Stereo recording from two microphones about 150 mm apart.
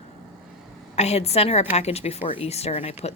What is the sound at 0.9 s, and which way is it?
Speech, 45° left (ahead or behind).